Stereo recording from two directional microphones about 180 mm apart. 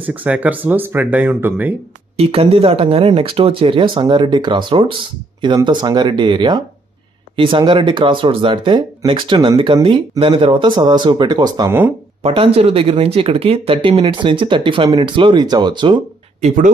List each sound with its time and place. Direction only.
0.0 s speech: 10° right (ahead or behind)
2.1 s speech: 30° right (ahead or behind)
12.2 s speech: 35° right (ahead or behind)
16.3 s speech: 45° right (ahead or behind)